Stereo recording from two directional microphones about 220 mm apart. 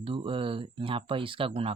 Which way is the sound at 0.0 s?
25° right (ahead or behind).